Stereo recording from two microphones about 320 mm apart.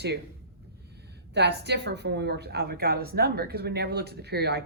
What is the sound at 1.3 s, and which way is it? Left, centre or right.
A woman's voice, right.